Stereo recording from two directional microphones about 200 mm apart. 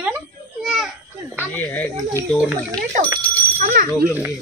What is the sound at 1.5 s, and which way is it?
Speech, 10° left (ahead or behind).